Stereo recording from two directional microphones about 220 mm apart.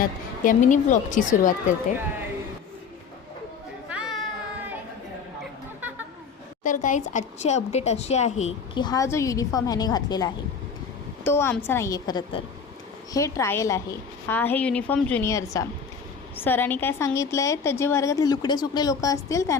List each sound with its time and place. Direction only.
0.0 s speech: 35° left (ahead or behind)
3.8 s a sound: 5° right (ahead or behind)
6.6 s speech: 35° left (ahead or behind)
8.8 s a woman's voice: 15° left (ahead or behind)